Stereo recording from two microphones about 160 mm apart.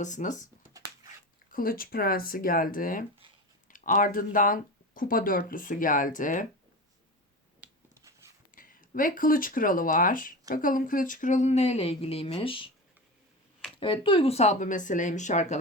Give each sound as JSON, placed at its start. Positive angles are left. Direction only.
{"t": 0.0, "sound": "speech", "side_deg": 50}
{"t": 1.5, "sound": "speech", "side_deg": 65}
{"t": 7.6, "sound": "a sound", "side_deg": -10}
{"t": 8.5, "sound": "speech", "side_deg": 60}
{"t": 13.7, "sound": "speech", "side_deg": 35}